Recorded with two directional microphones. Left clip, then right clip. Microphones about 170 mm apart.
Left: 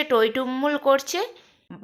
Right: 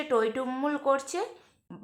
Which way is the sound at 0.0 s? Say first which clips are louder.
Left 6 dB; 25° left (ahead or behind).